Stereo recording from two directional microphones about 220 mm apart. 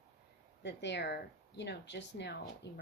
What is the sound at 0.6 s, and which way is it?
Speech, 55° left (ahead or behind).